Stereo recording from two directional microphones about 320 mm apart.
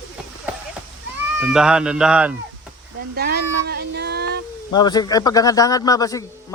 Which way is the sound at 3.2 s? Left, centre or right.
Right.